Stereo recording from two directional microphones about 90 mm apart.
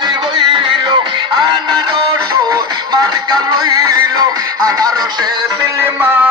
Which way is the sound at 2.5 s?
40° right (ahead or behind).